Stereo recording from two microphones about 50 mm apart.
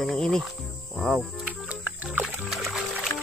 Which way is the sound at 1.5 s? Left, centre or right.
Right.